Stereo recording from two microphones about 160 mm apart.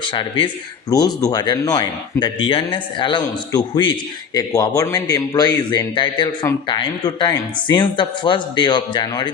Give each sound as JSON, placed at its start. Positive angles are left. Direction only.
{"t": 0.0, "sound": "a man's voice", "side_deg": 30}